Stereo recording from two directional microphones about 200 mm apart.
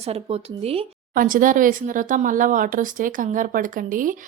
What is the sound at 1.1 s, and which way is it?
Speech, 40° right (ahead or behind).